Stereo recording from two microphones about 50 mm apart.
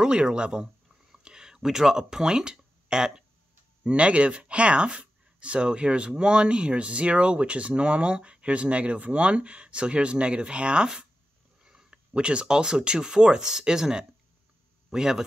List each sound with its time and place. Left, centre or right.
0.0 s speech: centre